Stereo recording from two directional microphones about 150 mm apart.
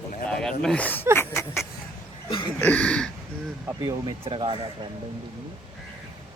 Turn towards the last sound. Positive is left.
turn(degrees=-35)  # may be behind; listen again after turning